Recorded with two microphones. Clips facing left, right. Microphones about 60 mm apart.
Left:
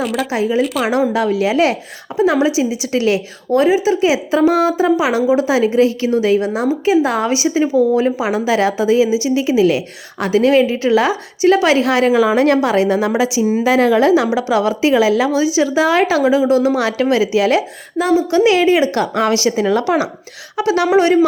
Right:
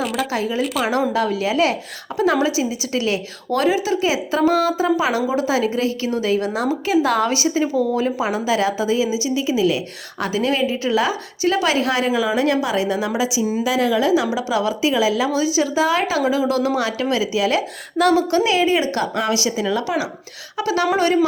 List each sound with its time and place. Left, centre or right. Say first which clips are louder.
0.0 s speech: left 3 dB; centre
0.3 s speech: left 6 dB; left
0.6 s speech: left 4 dB; centre
0.9 s speech: left 4 dB; left
2.1 s a woman's voice: left 5 dB; centre
2.6 s speech: left 5 dB; left
3.6 s speech: left 5 dB; centre
6.4 s a woman's voice: left 5 dB; centre
12.4 s a woman's voice: left 6 dB; left
16.8 s a woman's voice: left 6 dB; left
17.9 s a woman's voice: left 1 dB; centre
18.2 s a woman's voice: left 3 dB; right
18.5 s speech: left 5 dB; left